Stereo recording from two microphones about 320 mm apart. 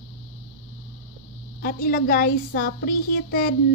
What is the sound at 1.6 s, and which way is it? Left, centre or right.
A woman's voice, left.